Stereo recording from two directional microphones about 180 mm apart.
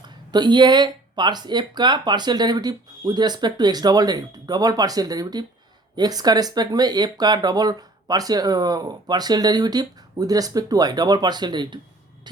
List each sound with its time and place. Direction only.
0.3 s speech: 25° right (ahead or behind)